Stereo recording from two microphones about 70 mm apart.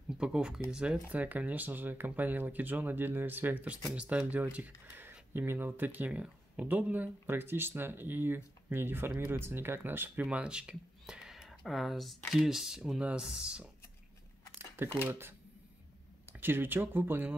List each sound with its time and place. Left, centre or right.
0.2 s speech: centre
1.0 s speech: right
10.2 s speech: centre
15.0 s speech: right
16.3 s speech: right